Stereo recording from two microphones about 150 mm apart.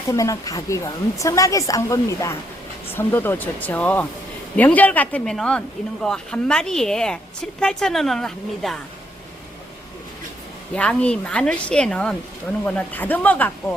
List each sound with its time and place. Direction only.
0.1 s a woman's voice: 20° left (ahead or behind); by 8.8 s centre (ahead or behind)
10.8 s a woman's voice: 10° left (ahead or behind)